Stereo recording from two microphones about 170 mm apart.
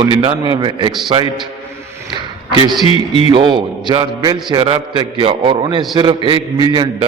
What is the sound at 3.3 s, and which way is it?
A man's voice, 30° right (ahead or behind).